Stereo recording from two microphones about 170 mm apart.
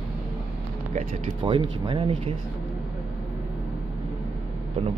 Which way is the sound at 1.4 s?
30° right (ahead or behind).